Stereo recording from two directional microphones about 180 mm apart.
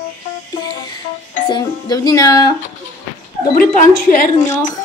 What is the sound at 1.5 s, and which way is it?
A woman's voice, 25° left (ahead or behind).